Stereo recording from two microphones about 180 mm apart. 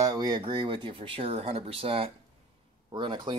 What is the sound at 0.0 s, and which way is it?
Speech, 20° right (ahead or behind).